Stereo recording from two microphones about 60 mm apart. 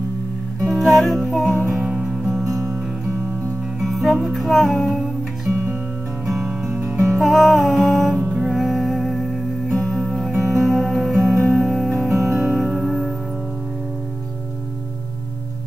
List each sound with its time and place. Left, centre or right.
0.7 s music: centre
1.8 s music: centre
2.0 s music: centre
3.8 s music: centre
8.2 s music: centre
8.5 s music: centre